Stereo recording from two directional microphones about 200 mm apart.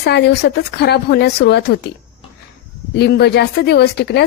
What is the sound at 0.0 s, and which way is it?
Speech, 55° left (ahead or behind).